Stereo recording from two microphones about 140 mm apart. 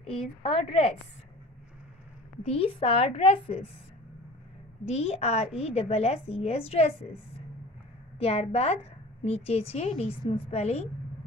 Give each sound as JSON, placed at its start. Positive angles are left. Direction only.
{"t": 0.4, "sound": "a woman's voice", "side_deg": 40}
{"t": 2.4, "sound": "a woman's voice", "side_deg": 45}
{"t": 4.8, "sound": "a woman's voice", "side_deg": 50}